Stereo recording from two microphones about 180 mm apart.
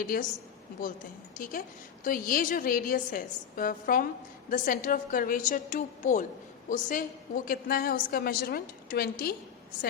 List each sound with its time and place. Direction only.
0.0 s a woman's voice: 50° left (ahead or behind)
2.0 s a woman's voice: 50° left (ahead or behind)